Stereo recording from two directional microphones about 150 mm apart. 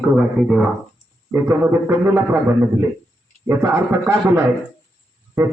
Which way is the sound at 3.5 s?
15° right (ahead or behind).